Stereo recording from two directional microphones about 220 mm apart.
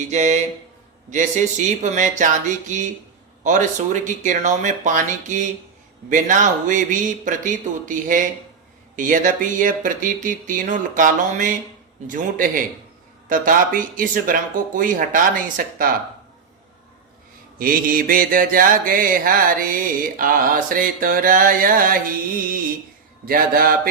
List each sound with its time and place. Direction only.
0.1 s mantra: 30° right (ahead or behind)
17.6 s mantra: 40° right (ahead or behind)
23.2 s mantra: 40° right (ahead or behind)